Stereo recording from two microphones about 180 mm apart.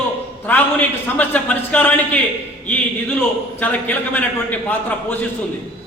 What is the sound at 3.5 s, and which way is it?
A man's voice, 10° left (ahead or behind).